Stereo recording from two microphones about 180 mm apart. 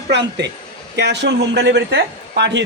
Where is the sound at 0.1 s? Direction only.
70° right (ahead or behind).